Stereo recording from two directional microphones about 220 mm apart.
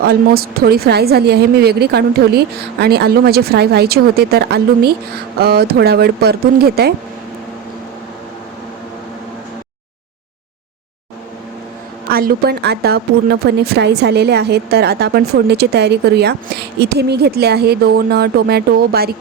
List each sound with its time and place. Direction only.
0.0 s a woman's voice: 45° right (ahead or behind)
12.1 s a woman's voice: 45° right (ahead or behind)